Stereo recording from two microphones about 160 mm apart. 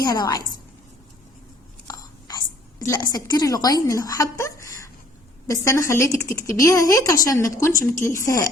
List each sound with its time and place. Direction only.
0.0 s speech: 25° left (ahead or behind)
1.9 s a sound: 25° left (ahead or behind)
5.5 s speech: 20° left (ahead or behind)